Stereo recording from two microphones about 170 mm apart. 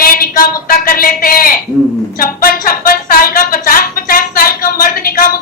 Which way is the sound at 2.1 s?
55° left (ahead or behind).